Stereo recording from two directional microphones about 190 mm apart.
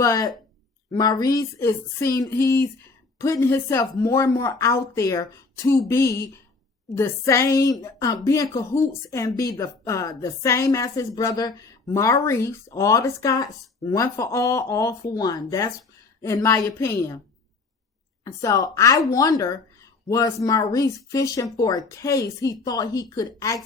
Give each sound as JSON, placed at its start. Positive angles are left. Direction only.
{"t": 0.0, "sound": "a woman's voice", "side_deg": 20}
{"t": 18.3, "sound": "a woman's voice", "side_deg": 20}